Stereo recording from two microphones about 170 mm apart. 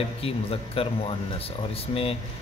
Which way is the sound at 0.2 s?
35° left (ahead or behind).